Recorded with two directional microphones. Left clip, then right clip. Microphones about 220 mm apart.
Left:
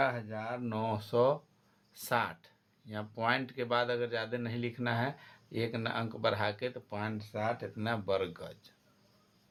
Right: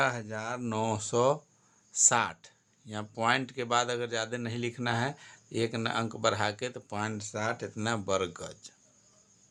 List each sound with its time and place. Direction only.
0.0 s speech: 40° right (ahead or behind)